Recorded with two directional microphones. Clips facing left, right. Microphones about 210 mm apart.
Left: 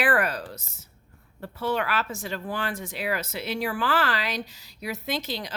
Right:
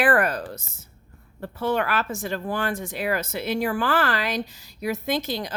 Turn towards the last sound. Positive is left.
turn(degrees=-50)  # may be behind; listen again after turning